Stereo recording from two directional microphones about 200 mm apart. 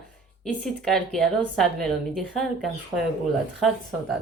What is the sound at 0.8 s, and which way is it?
Speech, centre (ahead or behind).